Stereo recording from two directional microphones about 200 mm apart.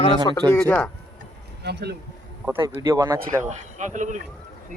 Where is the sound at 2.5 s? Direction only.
10° right (ahead or behind).